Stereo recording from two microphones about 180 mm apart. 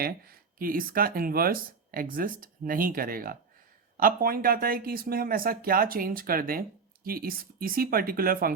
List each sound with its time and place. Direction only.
0.0 s speech: 55° right (ahead or behind)